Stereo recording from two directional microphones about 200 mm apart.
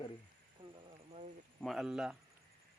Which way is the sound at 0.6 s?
25° right (ahead or behind).